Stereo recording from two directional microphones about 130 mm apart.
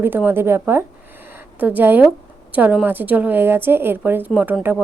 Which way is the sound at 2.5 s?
10° right (ahead or behind).